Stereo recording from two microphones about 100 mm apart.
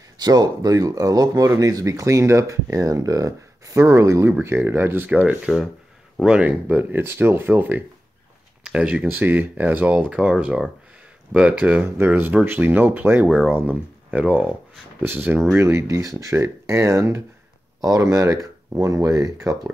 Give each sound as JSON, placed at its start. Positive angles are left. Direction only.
{"t": 0.2, "sound": "speech", "side_deg": -40}